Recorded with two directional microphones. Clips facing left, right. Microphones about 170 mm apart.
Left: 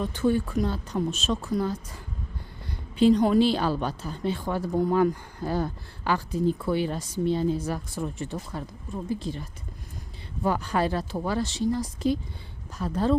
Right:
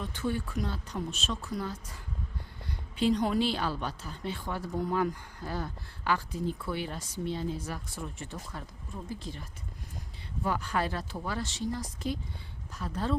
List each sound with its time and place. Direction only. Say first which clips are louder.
0.0 s a woman's voice: left 9 dB; 40° left (ahead or behind)
3.0 s a woman's voice: left 8 dB; 45° left (ahead or behind); by 9.4 s 30° left (ahead or behind)
10.4 s a woman's voice: left 6 dB; 35° left (ahead or behind)